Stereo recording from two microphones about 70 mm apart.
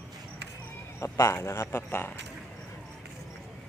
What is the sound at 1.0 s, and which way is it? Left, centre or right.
Speech, left.